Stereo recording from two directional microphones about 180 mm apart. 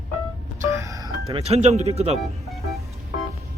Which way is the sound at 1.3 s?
35° right (ahead or behind).